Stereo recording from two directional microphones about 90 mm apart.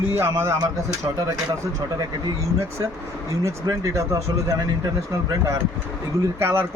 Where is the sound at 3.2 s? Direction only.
40° right (ahead or behind).